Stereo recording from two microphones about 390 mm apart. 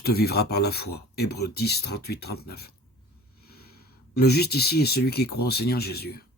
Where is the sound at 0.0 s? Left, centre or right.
Left.